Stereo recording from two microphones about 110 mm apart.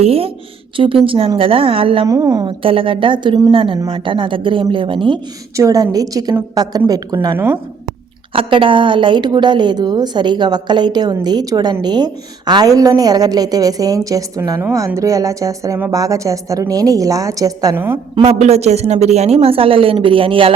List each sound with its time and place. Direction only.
0.0 s a woman's voice: 60° right (ahead or behind)
2.0 s a woman's voice: 30° right (ahead or behind)
2.6 s a woman's voice: 55° right (ahead or behind)
5.5 s a woman's voice: 30° right (ahead or behind)
7.3 s a woman's voice: 20° right (ahead or behind)
8.3 s a woman's voice: 55° right (ahead or behind); by 17.7 s 35° right (ahead or behind)
17.7 s a woman's voice: 20° right (ahead or behind)
18.1 s a woman's voice: 75° right (ahead or behind); by 20.5 s 55° right (ahead or behind)